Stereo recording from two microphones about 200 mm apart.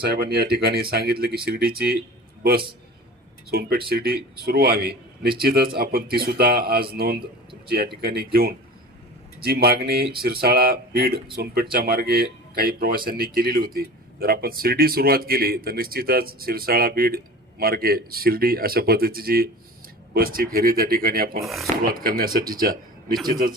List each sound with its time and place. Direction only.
0.0 s a man's voice: 50° right (ahead or behind)
3.5 s a man's voice: 50° right (ahead or behind)
21.4 s speech: centre (ahead or behind)
21.8 s a man's voice: 45° right (ahead or behind)